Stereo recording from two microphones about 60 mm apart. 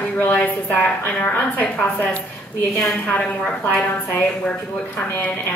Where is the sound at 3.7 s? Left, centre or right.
Left.